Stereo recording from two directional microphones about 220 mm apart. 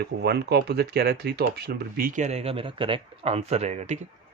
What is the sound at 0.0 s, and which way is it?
Speech, 45° right (ahead or behind).